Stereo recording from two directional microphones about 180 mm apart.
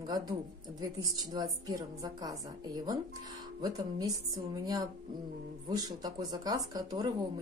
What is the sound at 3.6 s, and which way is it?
Speech, 20° right (ahead or behind).